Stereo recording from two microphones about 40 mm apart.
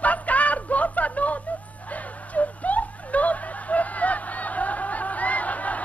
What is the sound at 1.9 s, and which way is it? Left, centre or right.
Snicker, left.